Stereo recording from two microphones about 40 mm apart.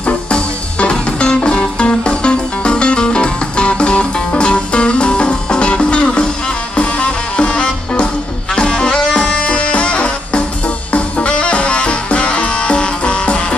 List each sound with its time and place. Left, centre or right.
0.0 s music: left